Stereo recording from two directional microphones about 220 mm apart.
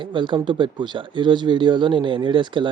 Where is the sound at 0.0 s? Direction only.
20° right (ahead or behind).